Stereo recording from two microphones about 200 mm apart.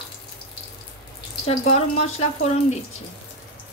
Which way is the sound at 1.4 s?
35° left (ahead or behind).